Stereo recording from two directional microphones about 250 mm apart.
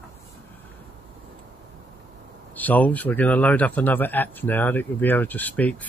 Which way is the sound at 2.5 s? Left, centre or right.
Centre.